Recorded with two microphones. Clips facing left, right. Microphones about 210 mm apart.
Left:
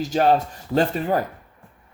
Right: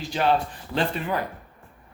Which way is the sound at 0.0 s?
45° left (ahead or behind).